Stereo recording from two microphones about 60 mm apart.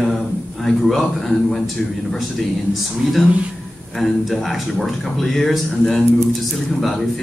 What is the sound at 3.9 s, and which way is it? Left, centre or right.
Speech, centre.